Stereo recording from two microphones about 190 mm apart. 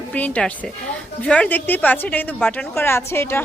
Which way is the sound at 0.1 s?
5° left (ahead or behind).